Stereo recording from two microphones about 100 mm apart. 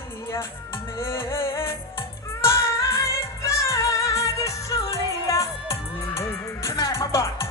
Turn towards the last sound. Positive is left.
turn(degrees=30)  # may be behind; listen again after turning